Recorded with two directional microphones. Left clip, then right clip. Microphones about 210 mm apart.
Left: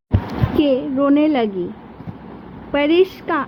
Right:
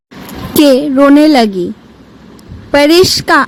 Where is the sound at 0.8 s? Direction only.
75° right (ahead or behind).